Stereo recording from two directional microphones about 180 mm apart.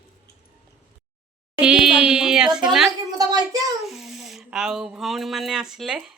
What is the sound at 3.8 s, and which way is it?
Speech, centre (ahead or behind).